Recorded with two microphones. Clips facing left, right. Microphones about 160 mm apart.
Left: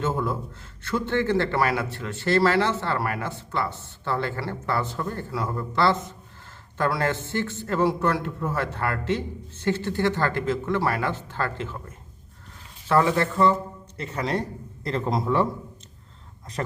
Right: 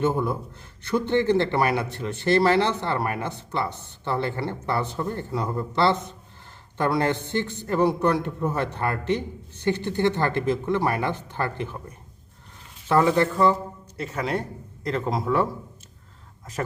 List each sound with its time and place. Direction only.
0.0 s a man's voice: 15° right (ahead or behind)
13.9 s a man's voice: 10° right (ahead or behind)